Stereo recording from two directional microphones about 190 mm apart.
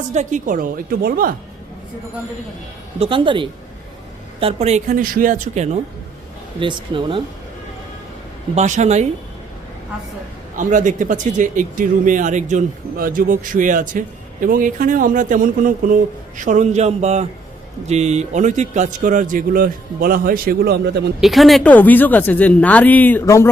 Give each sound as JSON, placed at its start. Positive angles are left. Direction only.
{"t": 0.1, "sound": "speech", "side_deg": -40}
{"t": 3.0, "sound": "speech", "side_deg": -25}
{"t": 6.6, "sound": "speech", "side_deg": -25}
{"t": 8.5, "sound": "speech", "side_deg": -40}
{"t": 10.6, "sound": "speech", "side_deg": -45}
{"t": 21.2, "sound": "speech", "side_deg": 0}